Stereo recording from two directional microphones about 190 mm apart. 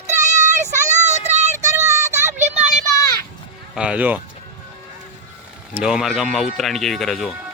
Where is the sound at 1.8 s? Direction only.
15° right (ahead or behind).